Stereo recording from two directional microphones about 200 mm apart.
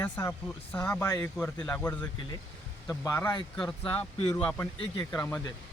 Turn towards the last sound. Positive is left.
turn(degrees=10)  # may be behind; listen again after turning